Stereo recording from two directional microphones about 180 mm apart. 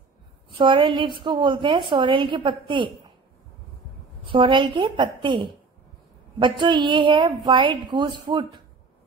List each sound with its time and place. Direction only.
0.5 s a woman's voice: 25° right (ahead or behind)
4.3 s a woman's voice: 25° right (ahead or behind)